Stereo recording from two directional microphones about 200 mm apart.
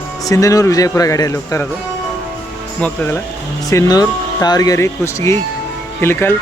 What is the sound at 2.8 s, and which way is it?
Speech, 10° left (ahead or behind).